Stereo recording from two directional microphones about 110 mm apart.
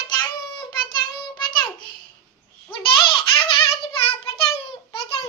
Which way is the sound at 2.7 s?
50° left (ahead or behind).